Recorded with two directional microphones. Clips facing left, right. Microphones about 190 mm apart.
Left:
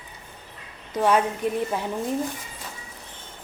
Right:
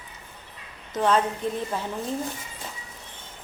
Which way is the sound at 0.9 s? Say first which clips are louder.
Left 1 dB; 15° left (ahead or behind).